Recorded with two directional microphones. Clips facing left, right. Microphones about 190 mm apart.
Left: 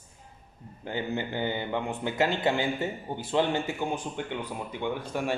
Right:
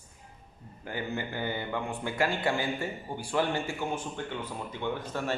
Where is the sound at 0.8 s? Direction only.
20° left (ahead or behind).